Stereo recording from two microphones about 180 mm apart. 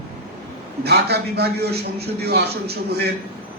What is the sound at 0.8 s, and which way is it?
Speech, 65° right (ahead or behind).